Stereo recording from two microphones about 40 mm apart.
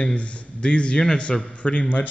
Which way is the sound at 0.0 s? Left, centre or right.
Left.